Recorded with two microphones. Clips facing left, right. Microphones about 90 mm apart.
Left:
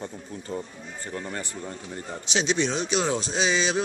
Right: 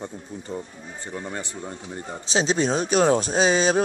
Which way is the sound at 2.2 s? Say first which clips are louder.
Right 3 dB; 35° right (ahead or behind).